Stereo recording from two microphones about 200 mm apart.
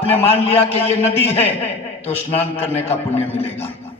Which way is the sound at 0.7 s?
30° left (ahead or behind).